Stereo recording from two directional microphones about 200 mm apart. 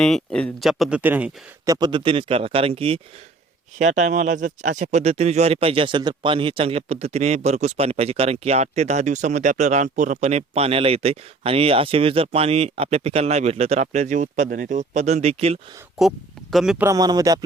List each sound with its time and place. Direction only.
0.0 s speech: centre (ahead or behind); by 15.5 s 30° right (ahead or behind)
16.0 s speech: centre (ahead or behind); by 17.4 s 20° right (ahead or behind)